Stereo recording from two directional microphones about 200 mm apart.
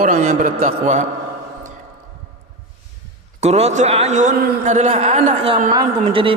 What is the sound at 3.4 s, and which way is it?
A man's voice, 35° right (ahead or behind).